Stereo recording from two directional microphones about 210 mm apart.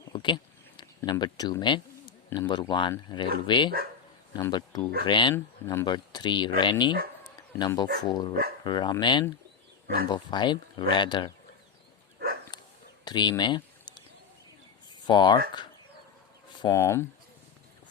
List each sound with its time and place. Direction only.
0.0 s a sound: 20° left (ahead or behind)
0.8 s speech: 20° left (ahead or behind)
7.3 s bow-wow: 20° left (ahead or behind)
8.0 s speech: 20° left (ahead or behind)
9.8 s speech: 45° right (ahead or behind)
10.1 s speech: 20° left (ahead or behind)
13.1 s a sound: 20° left (ahead or behind)
15.0 s speech: 20° left (ahead or behind)